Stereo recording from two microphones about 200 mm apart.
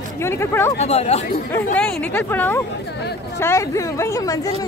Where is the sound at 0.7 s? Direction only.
30° left (ahead or behind).